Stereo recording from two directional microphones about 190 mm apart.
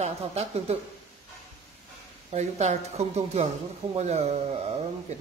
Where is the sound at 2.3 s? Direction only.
35° right (ahead or behind).